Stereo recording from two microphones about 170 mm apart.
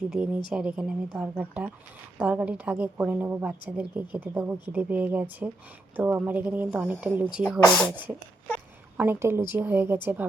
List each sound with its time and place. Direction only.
0.1 s a woman's voice: 5° right (ahead or behind)
9.0 s a woman's voice: 15° right (ahead or behind)